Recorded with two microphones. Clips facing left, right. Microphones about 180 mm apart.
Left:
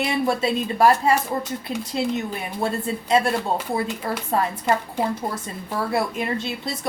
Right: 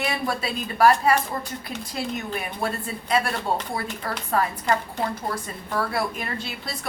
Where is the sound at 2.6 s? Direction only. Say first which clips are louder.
Left 7 dB; 25° left (ahead or behind).